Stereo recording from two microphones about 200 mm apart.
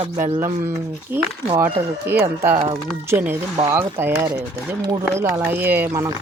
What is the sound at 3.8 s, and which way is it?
Speech, 10° right (ahead or behind).